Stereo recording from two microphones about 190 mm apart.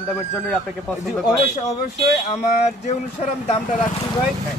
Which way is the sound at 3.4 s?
40° left (ahead or behind).